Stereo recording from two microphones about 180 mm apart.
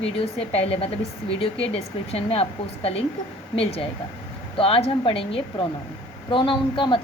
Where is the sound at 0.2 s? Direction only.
35° left (ahead or behind).